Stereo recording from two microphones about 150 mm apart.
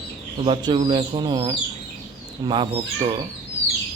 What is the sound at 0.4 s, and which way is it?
Speech, 35° right (ahead or behind).